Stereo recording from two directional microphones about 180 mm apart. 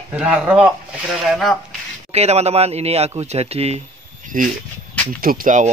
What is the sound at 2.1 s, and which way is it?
Speech, 35° right (ahead or behind).